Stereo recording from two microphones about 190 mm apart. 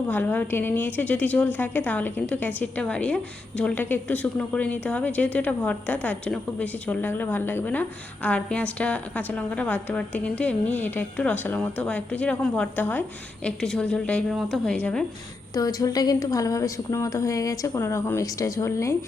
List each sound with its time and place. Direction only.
0.1 s a woman's voice: 10° left (ahead or behind)
15.5 s a woman's voice: 20° left (ahead or behind)